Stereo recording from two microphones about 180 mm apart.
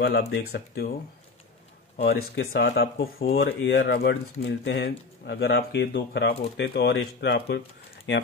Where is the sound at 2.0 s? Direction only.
60° left (ahead or behind).